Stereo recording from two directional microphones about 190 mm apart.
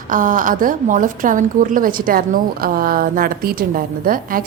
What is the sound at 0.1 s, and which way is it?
A woman's voice, 45° right (ahead or behind).